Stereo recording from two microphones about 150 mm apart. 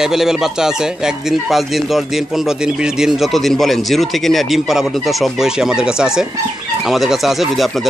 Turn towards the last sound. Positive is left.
turn(degrees=0)  # may be behind; listen again after turning